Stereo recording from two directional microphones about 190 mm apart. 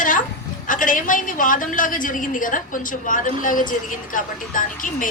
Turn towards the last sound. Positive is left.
turn(degrees=45)  # may be behind; listen again after turning